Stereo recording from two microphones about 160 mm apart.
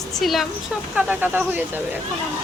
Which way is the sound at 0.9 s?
10° right (ahead or behind).